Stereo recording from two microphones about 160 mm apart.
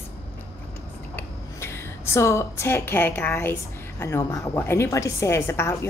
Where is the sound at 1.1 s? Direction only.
15° left (ahead or behind).